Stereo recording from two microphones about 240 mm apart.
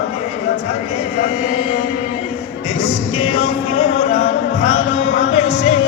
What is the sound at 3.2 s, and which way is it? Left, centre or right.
Music, left.